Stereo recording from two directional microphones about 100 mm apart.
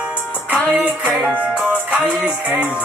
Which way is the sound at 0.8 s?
15° right (ahead or behind).